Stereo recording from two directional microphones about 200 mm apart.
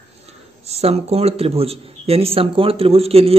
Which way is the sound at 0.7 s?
30° right (ahead or behind).